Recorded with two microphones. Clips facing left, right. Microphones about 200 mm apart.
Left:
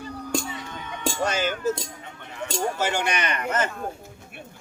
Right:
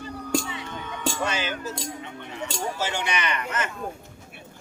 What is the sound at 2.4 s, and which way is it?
Speech, 55° left (ahead or behind).